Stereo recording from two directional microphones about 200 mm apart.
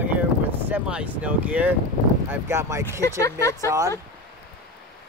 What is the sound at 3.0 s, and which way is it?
Speech, 15° left (ahead or behind).